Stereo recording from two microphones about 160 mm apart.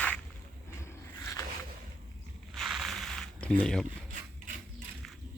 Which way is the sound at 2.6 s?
Centre (ahead or behind).